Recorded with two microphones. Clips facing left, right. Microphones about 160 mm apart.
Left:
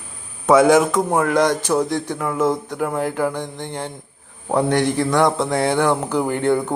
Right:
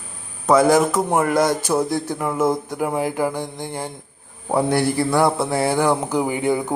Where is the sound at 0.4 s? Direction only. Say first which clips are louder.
Left 2 dB; centre (ahead or behind).